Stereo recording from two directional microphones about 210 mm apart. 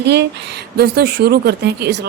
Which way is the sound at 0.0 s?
55° right (ahead or behind).